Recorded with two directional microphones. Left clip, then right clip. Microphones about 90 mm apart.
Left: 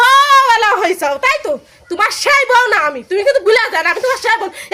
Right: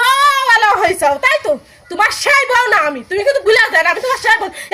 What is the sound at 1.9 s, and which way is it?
A woman's voice, 35° left (ahead or behind).